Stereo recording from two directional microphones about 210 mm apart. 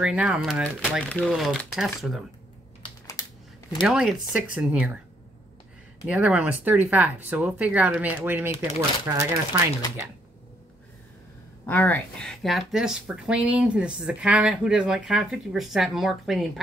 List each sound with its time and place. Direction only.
0.0 s speech: 5° right (ahead or behind)
2.8 s typing: 15° left (ahead or behind)
3.8 s speech: 5° right (ahead or behind)
6.0 s speech: 5° right (ahead or behind)
11.6 s speech: 10° left (ahead or behind)